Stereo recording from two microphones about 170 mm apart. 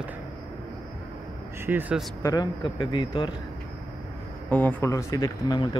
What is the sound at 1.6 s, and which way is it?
Speech, 10° right (ahead or behind).